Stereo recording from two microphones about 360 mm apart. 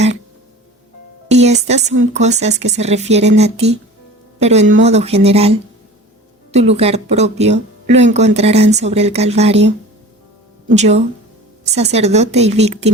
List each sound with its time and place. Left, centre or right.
1.3 s speech: centre
11.7 s speech: centre